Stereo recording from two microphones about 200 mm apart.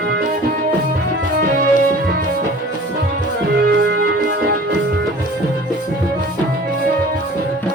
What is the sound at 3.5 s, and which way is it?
Music, 55° right (ahead or behind).